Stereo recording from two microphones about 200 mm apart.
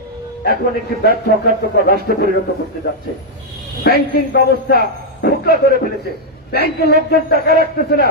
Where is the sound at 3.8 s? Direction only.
50° left (ahead or behind).